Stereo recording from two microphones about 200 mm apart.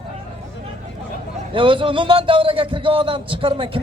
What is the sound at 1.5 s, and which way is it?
A man's voice, 25° right (ahead or behind).